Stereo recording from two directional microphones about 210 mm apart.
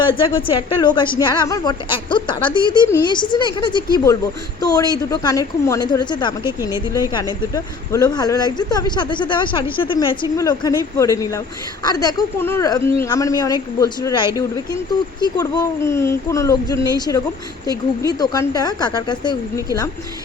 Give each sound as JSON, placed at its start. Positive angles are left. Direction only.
{"t": 0.0, "sound": "a woman's voice", "side_deg": 25}